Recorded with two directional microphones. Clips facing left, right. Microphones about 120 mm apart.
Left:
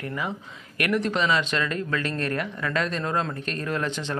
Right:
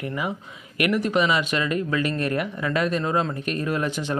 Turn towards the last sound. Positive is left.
turn(degrees=-10)  # may be behind; listen again after turning